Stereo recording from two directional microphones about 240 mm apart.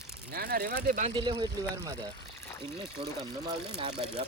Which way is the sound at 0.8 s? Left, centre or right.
Right.